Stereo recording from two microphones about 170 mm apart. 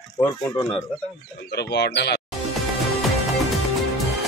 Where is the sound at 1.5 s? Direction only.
80° left.